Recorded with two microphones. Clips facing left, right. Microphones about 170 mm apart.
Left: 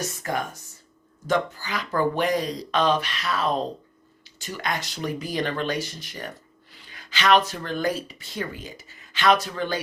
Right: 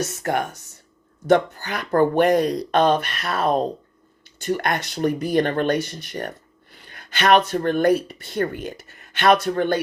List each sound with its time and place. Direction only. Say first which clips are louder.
0.0 s speech: right 5 dB; 70° right (ahead or behind)
1.3 s speech: right 7 dB; 60° right (ahead or behind)